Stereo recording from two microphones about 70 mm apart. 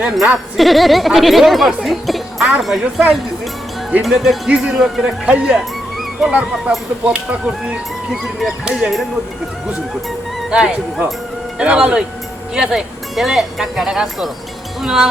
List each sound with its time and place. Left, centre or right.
0.0 s speech: centre
5.2 s speech: centre
5.5 s music: centre
7.0 s speech: centre
8.1 s speech: centre
10.5 s speech: centre